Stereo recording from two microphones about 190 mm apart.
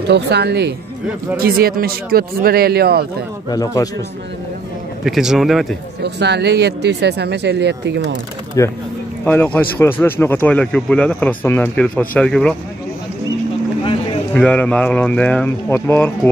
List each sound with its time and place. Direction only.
0.1 s speech: 60° right (ahead or behind)
1.3 s speech: 50° right (ahead or behind)
3.4 s speech: 20° left (ahead or behind)
5.0 s a man's voice: centre (ahead or behind)
6.0 s speech: 65° right (ahead or behind)
8.6 s speech: 15° left (ahead or behind)
14.3 s speech: 5° left (ahead or behind)